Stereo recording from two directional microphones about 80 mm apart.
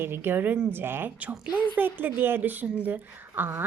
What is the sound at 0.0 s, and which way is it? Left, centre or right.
A woman's voice, right.